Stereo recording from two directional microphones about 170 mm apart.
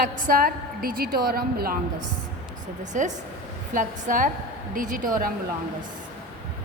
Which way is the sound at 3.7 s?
50° right (ahead or behind).